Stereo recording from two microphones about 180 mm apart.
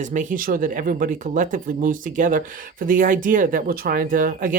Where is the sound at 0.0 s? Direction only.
45° right (ahead or behind).